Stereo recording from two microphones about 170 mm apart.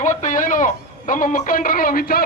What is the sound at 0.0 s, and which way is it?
A man's voice, 50° left (ahead or behind).